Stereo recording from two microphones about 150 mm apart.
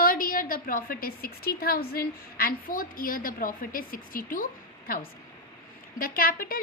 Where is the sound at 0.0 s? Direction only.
70° left (ahead or behind).